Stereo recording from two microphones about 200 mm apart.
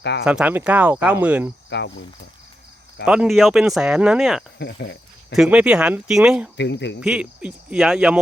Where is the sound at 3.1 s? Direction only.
5° right (ahead or behind).